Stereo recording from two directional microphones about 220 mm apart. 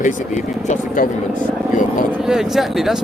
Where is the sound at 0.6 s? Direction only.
35° left (ahead or behind).